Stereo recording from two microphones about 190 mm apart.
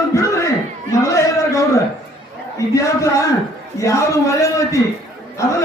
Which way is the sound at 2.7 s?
15° left (ahead or behind).